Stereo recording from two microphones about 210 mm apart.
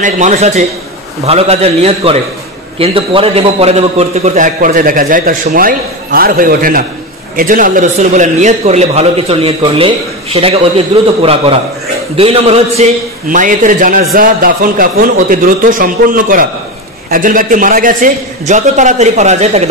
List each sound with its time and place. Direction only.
0.0 s a man's voice: 35° right (ahead or behind)
12.2 s a man's voice: 30° right (ahead or behind)